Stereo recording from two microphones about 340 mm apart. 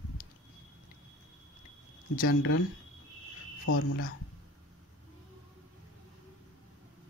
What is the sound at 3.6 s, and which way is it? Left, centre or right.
Speech, left.